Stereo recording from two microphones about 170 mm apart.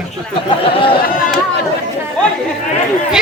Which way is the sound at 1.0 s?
55° left (ahead or behind).